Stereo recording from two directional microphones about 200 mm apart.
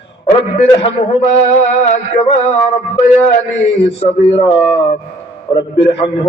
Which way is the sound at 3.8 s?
30° left (ahead or behind).